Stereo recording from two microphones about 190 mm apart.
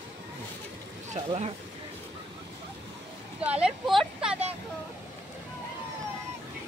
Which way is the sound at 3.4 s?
5° right (ahead or behind).